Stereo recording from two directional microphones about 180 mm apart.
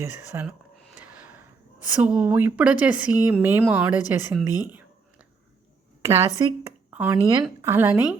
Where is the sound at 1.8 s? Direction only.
5° right (ahead or behind).